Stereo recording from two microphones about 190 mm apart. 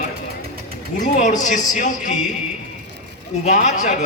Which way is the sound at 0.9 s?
40° left (ahead or behind).